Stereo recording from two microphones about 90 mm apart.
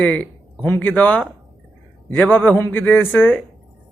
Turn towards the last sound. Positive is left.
turn(degrees=20)  # may be behind; listen again after turning